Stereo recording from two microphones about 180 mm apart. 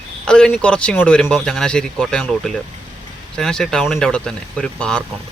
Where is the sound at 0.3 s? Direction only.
5° left (ahead or behind).